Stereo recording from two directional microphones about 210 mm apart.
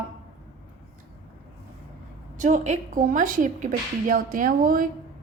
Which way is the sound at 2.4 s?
35° right (ahead or behind).